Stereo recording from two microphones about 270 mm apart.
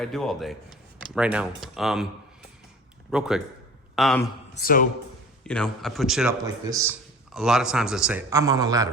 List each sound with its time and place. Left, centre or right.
0.0 s a man's voice: centre
3.1 s a man's voice: centre
4.5 s speech: left
5.4 s a man's voice: centre
6.4 s a man's voice: centre
7.3 s a man's voice: centre